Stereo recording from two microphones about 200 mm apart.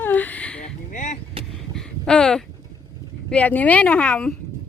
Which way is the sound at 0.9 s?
40° left (ahead or behind).